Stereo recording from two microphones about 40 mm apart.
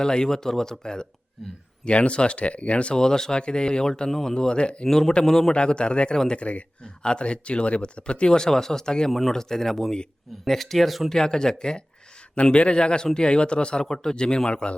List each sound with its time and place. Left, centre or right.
0.0 s speech: centre
1.8 s speech: left
3.0 s speech: centre
4.9 s speech: centre
5.5 s speech: left
9.0 s speech: centre
11.1 s speech: centre